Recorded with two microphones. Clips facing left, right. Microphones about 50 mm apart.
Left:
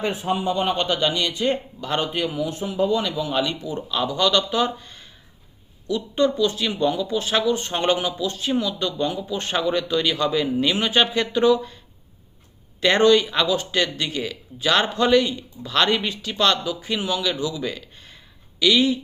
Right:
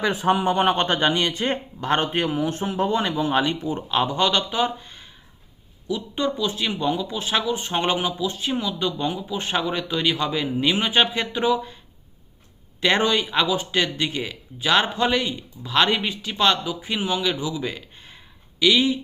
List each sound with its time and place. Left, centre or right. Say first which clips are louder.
0.0 s speech: right 3 dB; right; by 11.8 s centre
12.8 s speech: left 4 dB; centre